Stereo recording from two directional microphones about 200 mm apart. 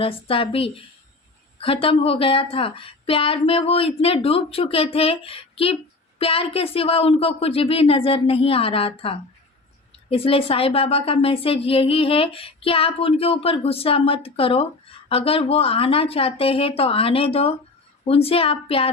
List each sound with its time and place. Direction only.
0.0 s a woman's voice: 25° left (ahead or behind)